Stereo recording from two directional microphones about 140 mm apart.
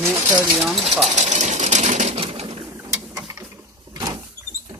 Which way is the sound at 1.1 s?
55° right (ahead or behind).